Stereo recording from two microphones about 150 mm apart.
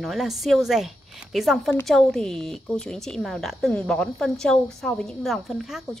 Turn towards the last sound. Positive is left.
turn(degrees=0)  # may be behind; listen again after turning